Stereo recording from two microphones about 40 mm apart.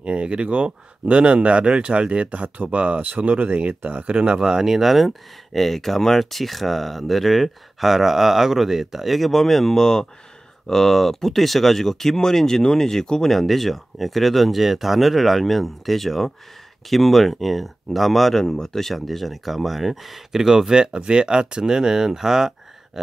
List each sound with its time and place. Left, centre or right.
0.0 s speech: right
3.0 s speech: right
4.4 s speech: centre
13.3 s speech: centre